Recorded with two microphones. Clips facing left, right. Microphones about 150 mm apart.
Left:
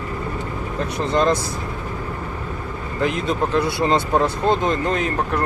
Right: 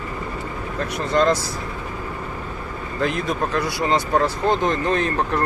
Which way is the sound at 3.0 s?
20° left (ahead or behind).